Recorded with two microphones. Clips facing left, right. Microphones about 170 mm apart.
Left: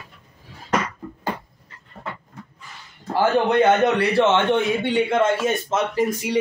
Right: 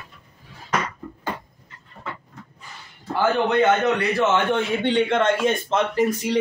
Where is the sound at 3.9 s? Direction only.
30° left (ahead or behind).